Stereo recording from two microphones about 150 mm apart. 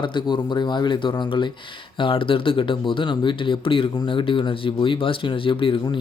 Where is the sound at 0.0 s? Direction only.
30° left (ahead or behind).